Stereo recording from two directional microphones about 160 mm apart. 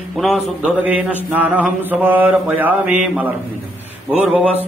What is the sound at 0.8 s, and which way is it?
Mantra, 10° right (ahead or behind).